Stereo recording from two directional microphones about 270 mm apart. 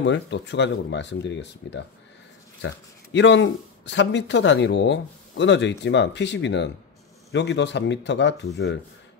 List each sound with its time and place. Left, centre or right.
0.0 s speech: left